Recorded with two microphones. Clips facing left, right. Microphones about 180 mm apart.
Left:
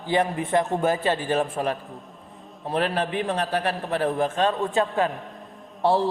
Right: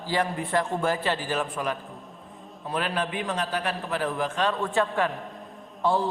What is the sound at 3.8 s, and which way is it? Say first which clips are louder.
A man's voice: left 4 dB; 25° left (ahead or behind).